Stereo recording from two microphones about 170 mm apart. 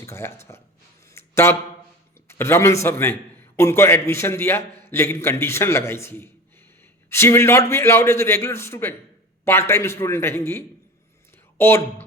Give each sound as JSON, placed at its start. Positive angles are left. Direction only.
{"t": 0.0, "sound": "a man's voice", "side_deg": 15}
{"t": 1.1, "sound": "a sound", "side_deg": 15}
{"t": 2.2, "sound": "a man's voice", "side_deg": 15}